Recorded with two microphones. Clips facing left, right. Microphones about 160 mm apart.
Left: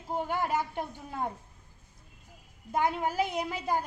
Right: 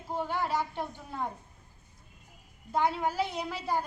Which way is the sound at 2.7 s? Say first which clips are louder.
Even; 50° left (ahead or behind).